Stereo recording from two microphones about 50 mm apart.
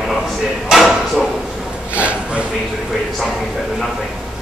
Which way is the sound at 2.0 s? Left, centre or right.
Right.